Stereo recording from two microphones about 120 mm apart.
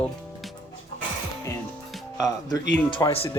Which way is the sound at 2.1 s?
30° left (ahead or behind).